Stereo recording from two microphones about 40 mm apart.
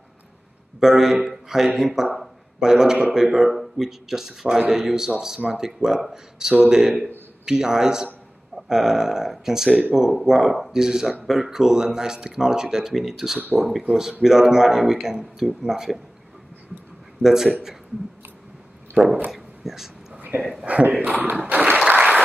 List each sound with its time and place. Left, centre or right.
0.7 s speech: centre
13.9 s speech: right
14.2 s speech: centre
17.2 s a man's voice: centre
19.0 s a man's voice: right
19.3 s a sound: centre
20.2 s a sound: right
20.6 s a man's voice: right
21.9 s applause: right